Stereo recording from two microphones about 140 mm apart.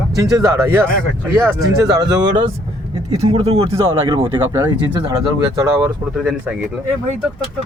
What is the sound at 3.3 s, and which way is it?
Speech, 45° right (ahead or behind).